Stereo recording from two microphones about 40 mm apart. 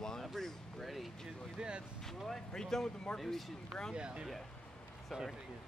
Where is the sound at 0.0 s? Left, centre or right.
Centre.